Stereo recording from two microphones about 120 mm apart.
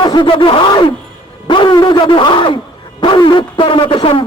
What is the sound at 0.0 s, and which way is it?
A man's voice, 45° left (ahead or behind).